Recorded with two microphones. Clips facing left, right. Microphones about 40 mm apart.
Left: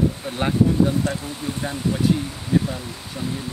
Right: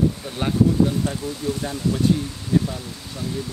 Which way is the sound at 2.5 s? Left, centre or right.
Centre.